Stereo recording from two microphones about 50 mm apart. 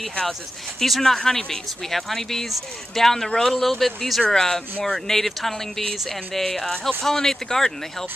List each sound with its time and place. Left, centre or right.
0.7 s speech: centre